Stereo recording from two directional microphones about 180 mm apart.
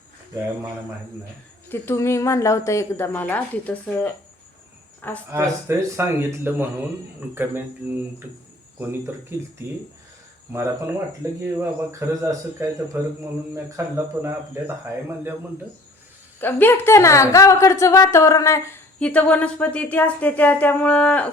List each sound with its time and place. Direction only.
1.7 s a woman's voice: 15° left (ahead or behind)
5.3 s speech: 15° right (ahead or behind)
11.2 s speech: 15° right (ahead or behind)
16.4 s a woman's voice: 10° left (ahead or behind)